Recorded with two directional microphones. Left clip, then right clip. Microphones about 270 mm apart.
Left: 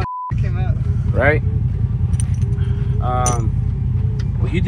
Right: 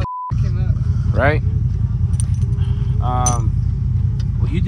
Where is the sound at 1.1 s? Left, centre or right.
Right.